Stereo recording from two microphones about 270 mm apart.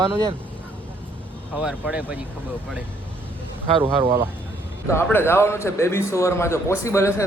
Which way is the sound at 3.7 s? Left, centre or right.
Centre.